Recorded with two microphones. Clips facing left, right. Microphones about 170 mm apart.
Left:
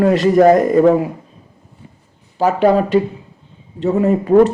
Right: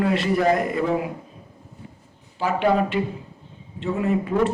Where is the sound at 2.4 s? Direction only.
40° left (ahead or behind).